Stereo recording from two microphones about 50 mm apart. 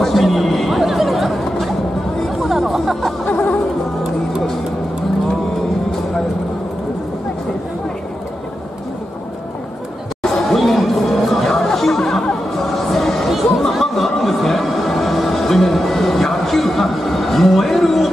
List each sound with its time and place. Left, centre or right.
0.0 s chatter: centre
2.2 s hubbub: centre
3.3 s music: left
10.3 s chatter: centre
12.7 s music: centre